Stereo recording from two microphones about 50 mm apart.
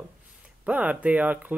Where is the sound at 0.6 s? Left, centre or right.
Right.